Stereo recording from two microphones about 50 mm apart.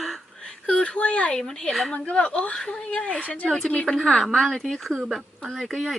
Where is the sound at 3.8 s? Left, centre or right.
Centre.